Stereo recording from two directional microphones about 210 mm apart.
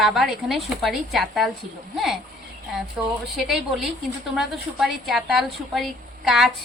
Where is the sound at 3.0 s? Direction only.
5° right (ahead or behind).